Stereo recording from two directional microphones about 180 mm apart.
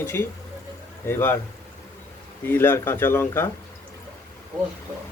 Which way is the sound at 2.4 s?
10° left (ahead or behind).